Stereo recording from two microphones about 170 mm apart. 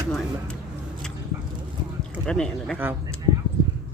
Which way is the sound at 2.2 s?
5° left (ahead or behind).